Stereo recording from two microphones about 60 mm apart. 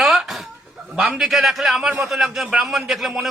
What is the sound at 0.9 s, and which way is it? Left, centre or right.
Speech, centre.